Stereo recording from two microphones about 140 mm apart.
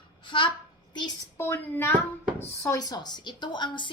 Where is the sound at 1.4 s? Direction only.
15° left (ahead or behind).